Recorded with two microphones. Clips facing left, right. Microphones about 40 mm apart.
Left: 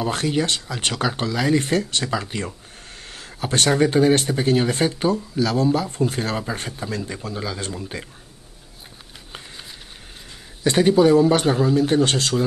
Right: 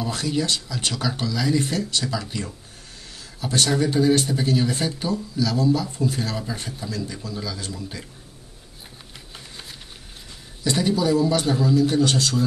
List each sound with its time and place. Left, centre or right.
0.0 s speech: left
10.6 s speech: left